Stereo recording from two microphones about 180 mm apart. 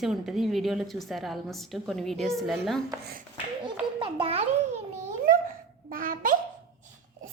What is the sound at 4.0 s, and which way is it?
Babbling, 30° right (ahead or behind).